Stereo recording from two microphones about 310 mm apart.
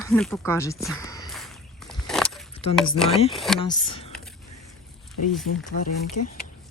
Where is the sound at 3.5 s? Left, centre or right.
Centre.